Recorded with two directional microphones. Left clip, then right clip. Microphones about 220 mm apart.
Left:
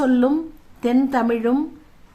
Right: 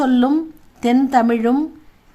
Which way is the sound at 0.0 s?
35° right (ahead or behind).